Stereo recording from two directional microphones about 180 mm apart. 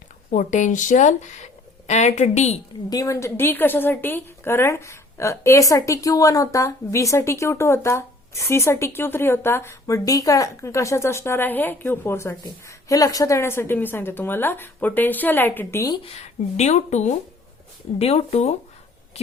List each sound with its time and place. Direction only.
0.3 s speech: 45° left (ahead or behind)
2.9 s a woman's voice: 15° left (ahead or behind)
16.0 s speech: 35° left (ahead or behind)